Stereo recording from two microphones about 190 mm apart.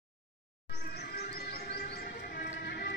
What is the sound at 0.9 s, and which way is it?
Music, 55° left (ahead or behind).